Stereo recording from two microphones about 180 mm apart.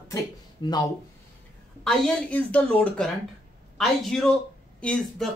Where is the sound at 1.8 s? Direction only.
Centre (ahead or behind).